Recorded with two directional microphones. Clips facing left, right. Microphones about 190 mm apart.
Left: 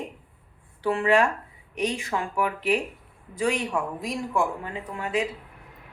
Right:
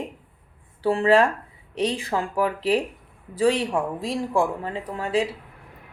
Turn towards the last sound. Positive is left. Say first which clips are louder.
# right 4 dB
turn(degrees=-30)  # may be behind; listen again after turning